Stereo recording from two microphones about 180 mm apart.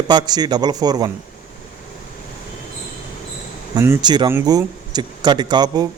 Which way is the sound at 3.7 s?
20° right (ahead or behind).